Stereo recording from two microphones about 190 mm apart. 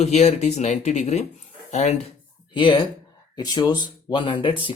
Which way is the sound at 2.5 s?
25° left (ahead or behind).